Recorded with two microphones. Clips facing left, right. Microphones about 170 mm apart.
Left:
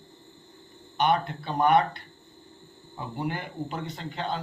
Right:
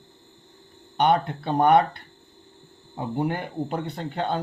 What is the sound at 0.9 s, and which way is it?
Speech, 60° right (ahead or behind).